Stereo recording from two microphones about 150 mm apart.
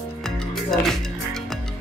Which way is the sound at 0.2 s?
Centre (ahead or behind).